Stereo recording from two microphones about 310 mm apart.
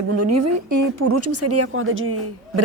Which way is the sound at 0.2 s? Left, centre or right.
Right.